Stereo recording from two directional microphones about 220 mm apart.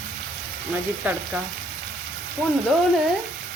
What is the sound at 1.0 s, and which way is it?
Frying, 5° right (ahead or behind).